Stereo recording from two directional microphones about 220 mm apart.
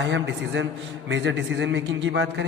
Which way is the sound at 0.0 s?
55° right (ahead or behind).